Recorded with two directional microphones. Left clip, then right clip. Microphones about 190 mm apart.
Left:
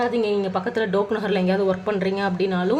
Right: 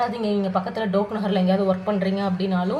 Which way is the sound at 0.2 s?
35° left (ahead or behind).